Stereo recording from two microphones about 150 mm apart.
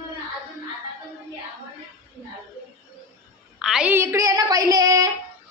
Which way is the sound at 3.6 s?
5° right (ahead or behind).